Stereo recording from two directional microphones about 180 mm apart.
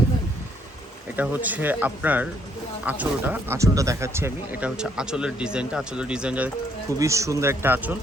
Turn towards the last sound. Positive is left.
turn(degrees=-10)  # may be behind; listen again after turning